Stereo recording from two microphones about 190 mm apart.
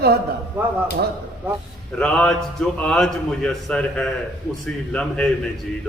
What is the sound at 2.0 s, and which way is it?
A man's voice, 5° left (ahead or behind).